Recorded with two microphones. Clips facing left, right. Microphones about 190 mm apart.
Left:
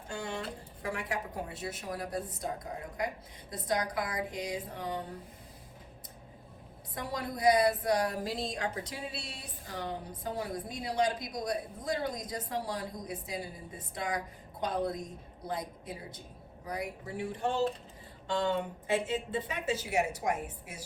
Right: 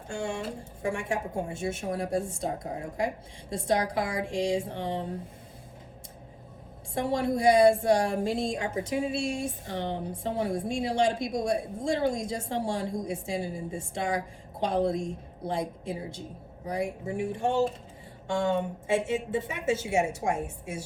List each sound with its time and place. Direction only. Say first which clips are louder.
0.1 s a woman's voice: right 5 dB; 25° right (ahead or behind)
6.9 s a woman's voice: right 10 dB; 25° right (ahead or behind)
18.5 s a woman's voice: right 4 dB; 25° right (ahead or behind)